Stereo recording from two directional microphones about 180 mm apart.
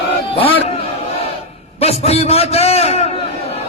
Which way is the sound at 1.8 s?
35° left (ahead or behind).